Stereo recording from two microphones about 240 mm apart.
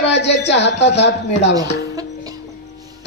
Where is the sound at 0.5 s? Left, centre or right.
Left.